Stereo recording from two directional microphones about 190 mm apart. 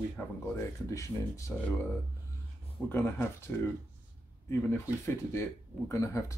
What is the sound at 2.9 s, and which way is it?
Speech, 10° left (ahead or behind).